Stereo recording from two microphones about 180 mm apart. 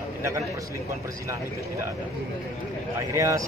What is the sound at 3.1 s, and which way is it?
Speech, 15° right (ahead or behind).